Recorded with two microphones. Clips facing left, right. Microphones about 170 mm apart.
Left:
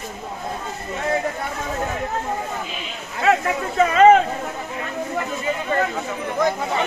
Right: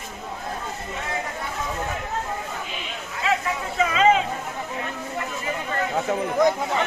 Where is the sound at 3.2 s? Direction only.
60° left (ahead or behind).